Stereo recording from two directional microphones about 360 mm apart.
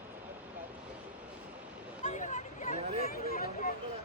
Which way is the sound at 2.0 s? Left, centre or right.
Centre.